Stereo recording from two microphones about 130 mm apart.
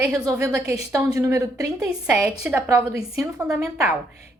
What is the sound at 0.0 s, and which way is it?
A woman's voice, 25° right (ahead or behind).